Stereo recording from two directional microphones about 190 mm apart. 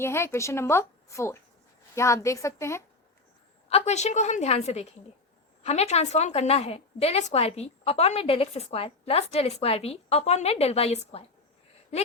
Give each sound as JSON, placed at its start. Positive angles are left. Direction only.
{"t": 0.0, "sound": "a woman's voice", "side_deg": 15}
{"t": 3.7, "sound": "a woman's voice", "side_deg": 35}